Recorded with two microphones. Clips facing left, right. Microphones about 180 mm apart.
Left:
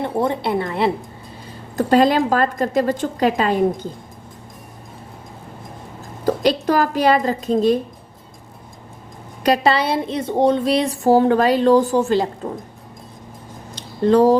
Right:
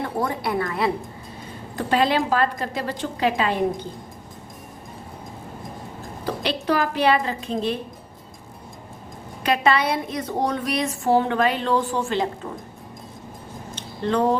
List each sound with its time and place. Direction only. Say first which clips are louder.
0.0 s a woman's voice: left 5 dB; 25° left (ahead or behind)
1.7 s a woman's voice: left 6 dB; 40° left (ahead or behind)
6.2 s a woman's voice: left 7 dB; 45° left (ahead or behind)
9.4 s a woman's voice: left 4 dB; 35° left (ahead or behind)
13.7 s a sound: left 8 dB; 35° left (ahead or behind)